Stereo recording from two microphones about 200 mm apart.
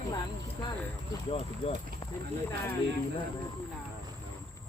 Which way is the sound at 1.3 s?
30° left (ahead or behind).